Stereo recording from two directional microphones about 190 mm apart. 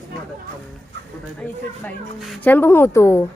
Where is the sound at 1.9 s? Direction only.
10° left (ahead or behind).